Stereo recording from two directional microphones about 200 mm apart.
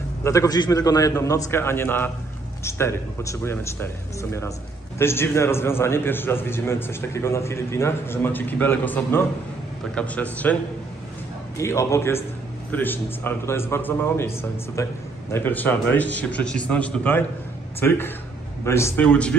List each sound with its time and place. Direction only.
0.2 s a man's voice: 15° left (ahead or behind)